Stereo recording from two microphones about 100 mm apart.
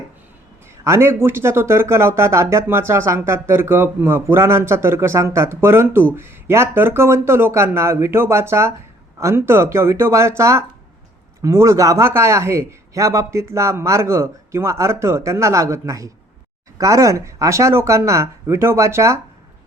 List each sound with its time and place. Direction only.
0.9 s speech: 25° right (ahead or behind)